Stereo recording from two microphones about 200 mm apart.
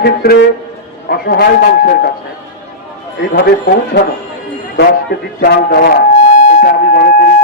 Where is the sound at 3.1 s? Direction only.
50° left (ahead or behind).